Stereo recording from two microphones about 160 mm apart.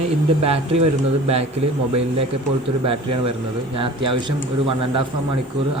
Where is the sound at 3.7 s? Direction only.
35° right (ahead or behind).